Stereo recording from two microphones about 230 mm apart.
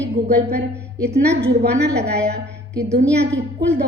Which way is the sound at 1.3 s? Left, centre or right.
Right.